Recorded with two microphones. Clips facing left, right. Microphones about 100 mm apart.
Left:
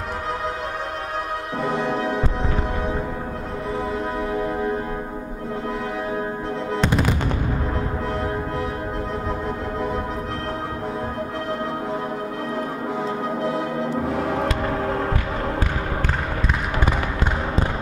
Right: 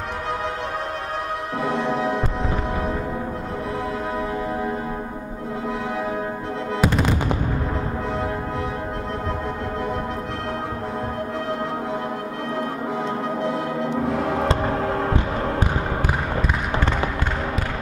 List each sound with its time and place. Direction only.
1.6 s music: centre (ahead or behind)
6.8 s music: 5° right (ahead or behind)
13.4 s music: centre (ahead or behind)
14.7 s heart sounds: centre (ahead or behind)